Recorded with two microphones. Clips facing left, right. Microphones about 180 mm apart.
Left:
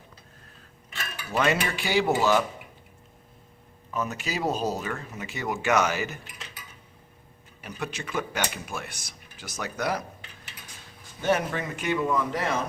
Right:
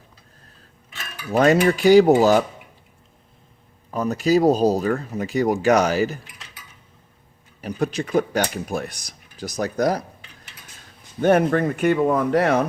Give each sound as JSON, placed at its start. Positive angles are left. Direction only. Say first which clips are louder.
{"t": 1.3, "sound": "speech", "louder": "right 9 dB", "side_deg": -40}
{"t": 3.9, "sound": "speech", "louder": "right 12 dB", "side_deg": -35}
{"t": 7.6, "sound": "speech", "louder": "right 11 dB", "side_deg": -35}
{"t": 11.2, "sound": "speech", "louder": "right 9 dB", "side_deg": -55}